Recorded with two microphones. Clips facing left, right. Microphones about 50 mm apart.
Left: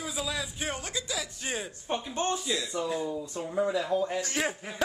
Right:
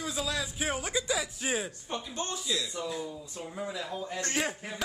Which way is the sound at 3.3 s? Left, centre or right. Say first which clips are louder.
Left 9 dB; left.